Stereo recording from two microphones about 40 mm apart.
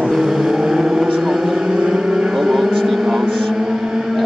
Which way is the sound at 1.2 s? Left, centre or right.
Centre.